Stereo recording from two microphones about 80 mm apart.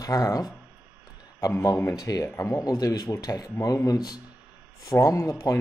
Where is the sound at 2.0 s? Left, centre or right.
Left.